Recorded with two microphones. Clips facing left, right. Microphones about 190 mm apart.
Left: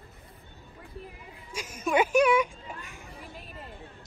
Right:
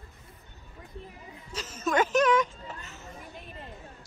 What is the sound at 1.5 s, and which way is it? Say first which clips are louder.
Children playing: left 1 dB; 10° left (ahead or behind).